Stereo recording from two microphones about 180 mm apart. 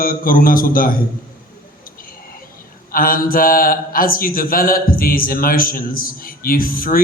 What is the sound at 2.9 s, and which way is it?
A man's voice, 50° left (ahead or behind).